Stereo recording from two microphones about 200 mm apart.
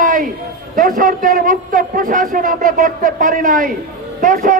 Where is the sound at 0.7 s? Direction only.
40° right (ahead or behind).